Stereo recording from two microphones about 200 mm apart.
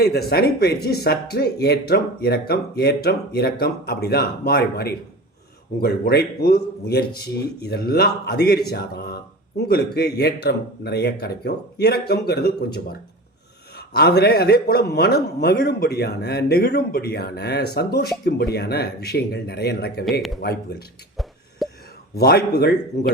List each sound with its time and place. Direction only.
0.0 s speech: 50° left (ahead or behind)
21.2 s a sound: centre (ahead or behind)
22.2 s speech: 50° left (ahead or behind)